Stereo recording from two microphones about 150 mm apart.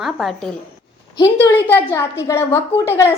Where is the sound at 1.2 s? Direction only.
15° left (ahead or behind).